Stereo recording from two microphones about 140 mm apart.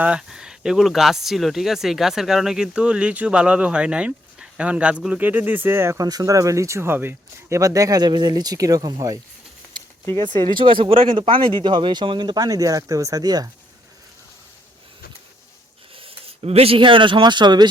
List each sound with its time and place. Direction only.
0.0 s speech: 5° right (ahead or behind); by 9.1 s 25° right (ahead or behind)
10.2 s speech: 35° right (ahead or behind)
16.0 s speech: 45° right (ahead or behind)